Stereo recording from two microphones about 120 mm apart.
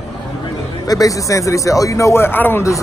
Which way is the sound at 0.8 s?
30° left (ahead or behind).